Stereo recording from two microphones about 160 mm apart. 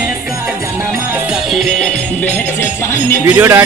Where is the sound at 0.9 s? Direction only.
10° right (ahead or behind); by 3.2 s 15° left (ahead or behind).